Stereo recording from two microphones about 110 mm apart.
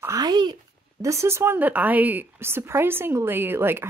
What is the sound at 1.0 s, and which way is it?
A woman's voice, 25° right (ahead or behind).